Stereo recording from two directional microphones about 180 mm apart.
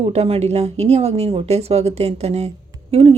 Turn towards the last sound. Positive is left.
turn(degrees=-35)  # may be behind; listen again after turning